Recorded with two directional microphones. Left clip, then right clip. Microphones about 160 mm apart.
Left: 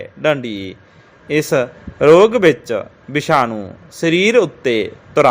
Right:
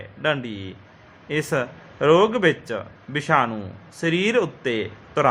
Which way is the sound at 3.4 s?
20° left (ahead or behind).